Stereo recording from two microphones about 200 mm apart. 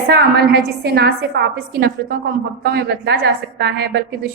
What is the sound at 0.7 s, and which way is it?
A woman's voice, 55° right (ahead or behind).